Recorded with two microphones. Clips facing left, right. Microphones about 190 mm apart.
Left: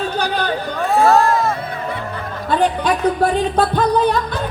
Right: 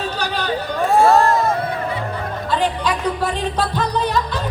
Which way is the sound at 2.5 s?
55° left (ahead or behind).